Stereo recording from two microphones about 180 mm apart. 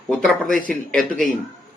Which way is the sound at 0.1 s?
5° left (ahead or behind).